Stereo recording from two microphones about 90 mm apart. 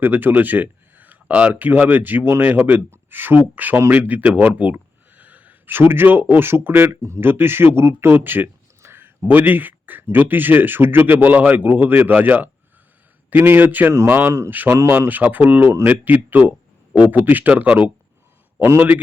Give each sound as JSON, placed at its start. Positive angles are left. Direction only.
{"t": 0.0, "sound": "speech", "side_deg": -20}